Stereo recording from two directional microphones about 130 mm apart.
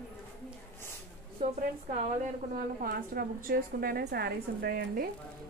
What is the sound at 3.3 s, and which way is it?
Speech, 90° right.